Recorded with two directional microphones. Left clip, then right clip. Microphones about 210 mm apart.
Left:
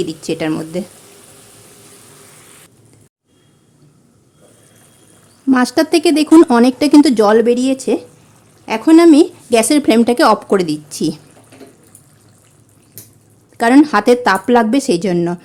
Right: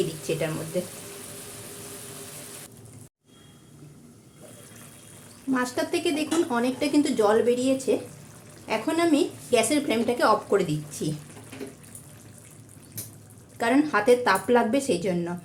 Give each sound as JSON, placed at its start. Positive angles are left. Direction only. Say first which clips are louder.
{"t": 0.3, "sound": "speech", "louder": "left 10 dB", "side_deg": 45}
{"t": 5.5, "sound": "speech", "louder": "left 13 dB", "side_deg": 50}
{"t": 13.6, "sound": "speech", "louder": "left 12 dB", "side_deg": 50}